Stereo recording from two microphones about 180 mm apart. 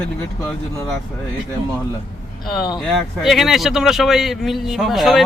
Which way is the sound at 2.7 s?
Centre (ahead or behind).